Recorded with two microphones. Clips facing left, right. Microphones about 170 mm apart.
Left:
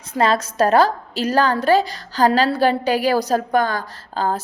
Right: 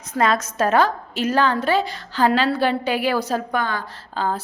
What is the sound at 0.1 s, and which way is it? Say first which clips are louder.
A woman's voice: left 2 dB; 30° left (ahead or behind).